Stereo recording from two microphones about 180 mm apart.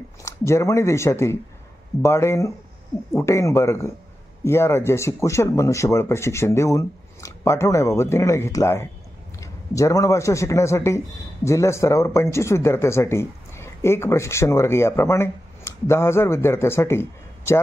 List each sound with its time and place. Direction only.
0.2 s a man's voice: 15° left (ahead or behind)